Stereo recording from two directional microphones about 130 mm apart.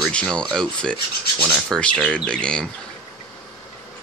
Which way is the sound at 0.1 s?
10° left (ahead or behind).